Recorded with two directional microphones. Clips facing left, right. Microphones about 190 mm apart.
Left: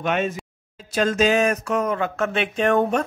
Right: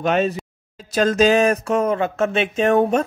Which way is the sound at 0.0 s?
35° right (ahead or behind).